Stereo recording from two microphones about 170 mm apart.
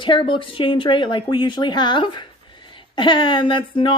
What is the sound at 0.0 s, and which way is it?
Speech, 30° left (ahead or behind).